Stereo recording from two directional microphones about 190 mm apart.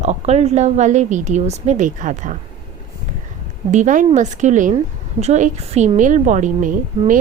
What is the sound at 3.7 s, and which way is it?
A woman's voice, 40° right (ahead or behind).